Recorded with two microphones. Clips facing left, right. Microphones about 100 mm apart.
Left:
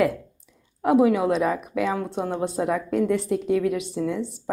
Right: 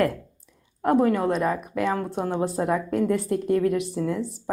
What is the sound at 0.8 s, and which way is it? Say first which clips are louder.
A woman's voice: left 2 dB; 5° left (ahead or behind).